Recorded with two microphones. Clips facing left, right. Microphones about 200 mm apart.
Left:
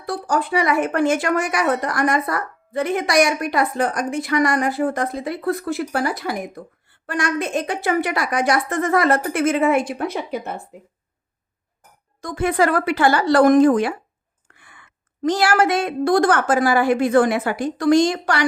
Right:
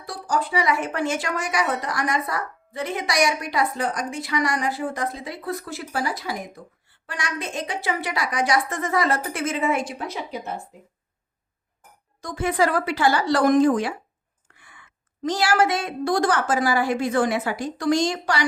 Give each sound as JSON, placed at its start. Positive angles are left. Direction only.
{"t": 0.0, "sound": "a woman's voice", "side_deg": 55}
{"t": 12.2, "sound": "a woman's voice", "side_deg": 60}